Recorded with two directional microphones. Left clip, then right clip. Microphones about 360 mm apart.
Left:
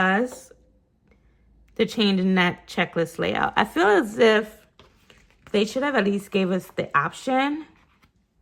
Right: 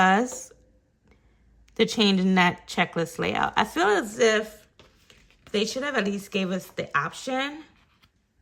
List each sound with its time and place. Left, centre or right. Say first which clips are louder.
0.0 s speech: right 1 dB; centre
1.7 s speech: even; centre